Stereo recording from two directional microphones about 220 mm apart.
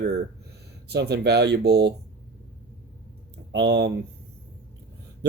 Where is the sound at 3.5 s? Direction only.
50° right (ahead or behind).